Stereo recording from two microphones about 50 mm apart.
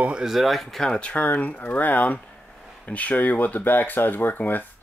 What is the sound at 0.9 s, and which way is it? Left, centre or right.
Speech, left.